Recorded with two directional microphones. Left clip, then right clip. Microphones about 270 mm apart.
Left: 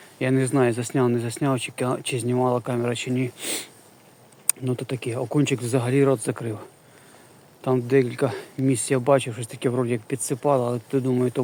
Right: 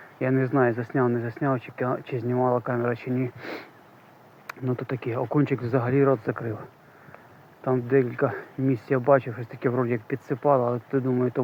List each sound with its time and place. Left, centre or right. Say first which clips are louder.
0.2 s speech: left 1 dB; centre